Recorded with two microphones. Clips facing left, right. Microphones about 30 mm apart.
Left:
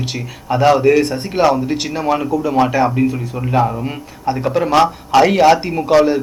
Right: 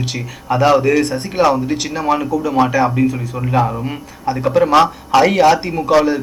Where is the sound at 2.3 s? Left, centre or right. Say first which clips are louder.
Left 1 dB; left.